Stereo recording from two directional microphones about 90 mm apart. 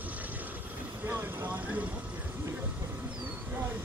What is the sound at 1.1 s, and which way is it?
Vehicle, 20° right (ahead or behind).